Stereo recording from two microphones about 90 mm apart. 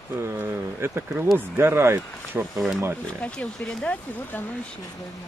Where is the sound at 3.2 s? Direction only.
10° left (ahead or behind).